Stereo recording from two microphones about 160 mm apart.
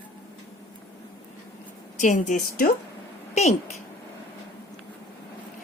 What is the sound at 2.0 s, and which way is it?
Speech, 50° left (ahead or behind).